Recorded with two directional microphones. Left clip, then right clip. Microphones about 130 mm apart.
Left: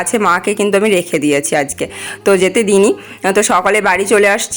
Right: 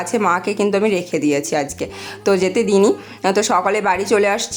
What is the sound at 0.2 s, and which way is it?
A woman's voice, 15° left (ahead or behind).